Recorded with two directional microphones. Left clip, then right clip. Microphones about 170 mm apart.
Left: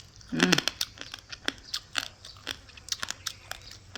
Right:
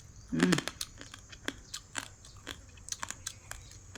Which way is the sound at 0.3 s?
25° right (ahead or behind).